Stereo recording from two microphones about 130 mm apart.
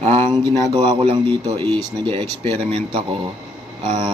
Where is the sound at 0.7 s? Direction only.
40° right (ahead or behind).